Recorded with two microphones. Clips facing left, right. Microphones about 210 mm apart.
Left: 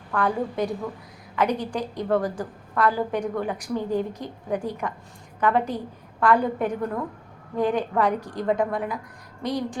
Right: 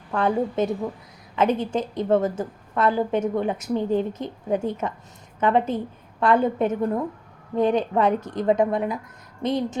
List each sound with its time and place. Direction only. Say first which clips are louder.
0.1 s a woman's voice: right 3 dB; 25° right (ahead or behind)